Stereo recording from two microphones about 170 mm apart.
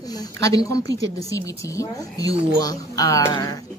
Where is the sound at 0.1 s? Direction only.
20° left (ahead or behind).